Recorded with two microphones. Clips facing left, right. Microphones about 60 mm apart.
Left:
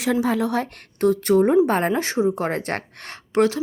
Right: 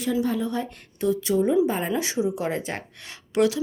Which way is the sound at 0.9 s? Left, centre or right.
Left.